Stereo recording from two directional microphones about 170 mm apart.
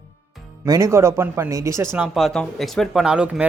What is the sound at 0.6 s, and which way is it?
Speech, 20° right (ahead or behind).